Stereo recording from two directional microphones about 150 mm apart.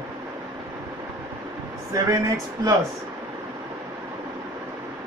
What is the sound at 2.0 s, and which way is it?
Speech, 20° right (ahead or behind).